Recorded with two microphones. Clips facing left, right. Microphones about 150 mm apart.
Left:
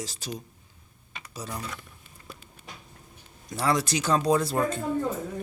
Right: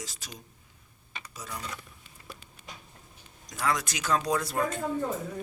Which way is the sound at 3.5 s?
30° left (ahead or behind).